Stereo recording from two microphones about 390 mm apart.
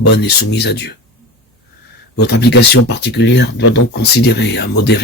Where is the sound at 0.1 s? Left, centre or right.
Left.